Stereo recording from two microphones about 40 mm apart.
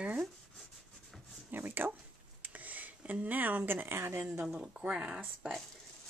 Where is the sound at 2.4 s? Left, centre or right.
Right.